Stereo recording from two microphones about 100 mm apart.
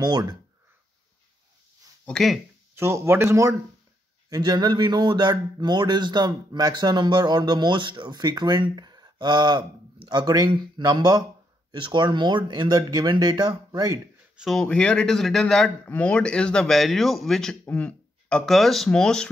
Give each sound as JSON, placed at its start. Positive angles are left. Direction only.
{"t": 0.0, "sound": "speech", "side_deg": -45}
{"t": 2.0, "sound": "a man's voice", "side_deg": 0}
{"t": 2.7, "sound": "speech", "side_deg": -25}
{"t": 4.3, "sound": "speech", "side_deg": -45}
{"t": 13.7, "sound": "speech", "side_deg": -35}
{"t": 14.3, "sound": "a man's voice", "side_deg": 0}
{"t": 17.6, "sound": "speech", "side_deg": 15}